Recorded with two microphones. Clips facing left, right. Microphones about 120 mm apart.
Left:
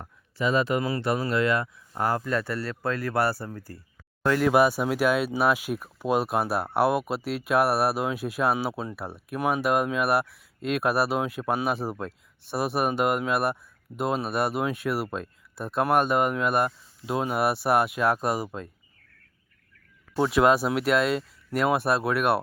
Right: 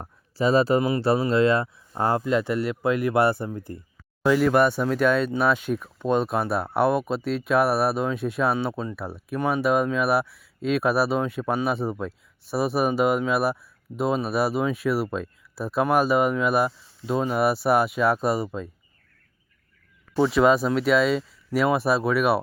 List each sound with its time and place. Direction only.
0.0 s a sound: 35° right (ahead or behind)
0.8 s speech: 25° right (ahead or behind)
4.3 s speech: centre (ahead or behind)
20.1 s speech: centre (ahead or behind)